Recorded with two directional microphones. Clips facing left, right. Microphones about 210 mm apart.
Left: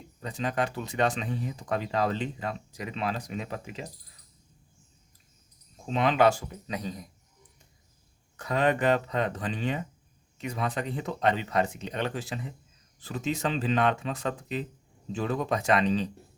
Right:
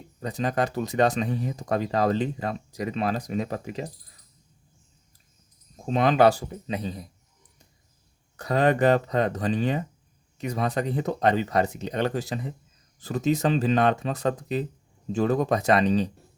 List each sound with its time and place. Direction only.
0.2 s speech: 40° right (ahead or behind)
5.8 s speech: 40° right (ahead or behind)
8.4 s speech: 35° right (ahead or behind)